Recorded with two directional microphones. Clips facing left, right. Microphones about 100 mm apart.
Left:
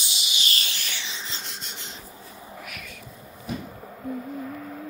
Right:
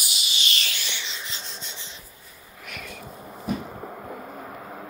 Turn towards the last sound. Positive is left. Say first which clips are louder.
# left 3 dB
turn(degrees=-35)  # may be behind; listen again after turning